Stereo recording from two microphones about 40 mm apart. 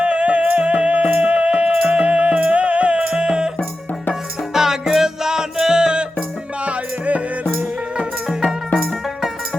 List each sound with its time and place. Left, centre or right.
0.0 s music: right
6.7 s music: right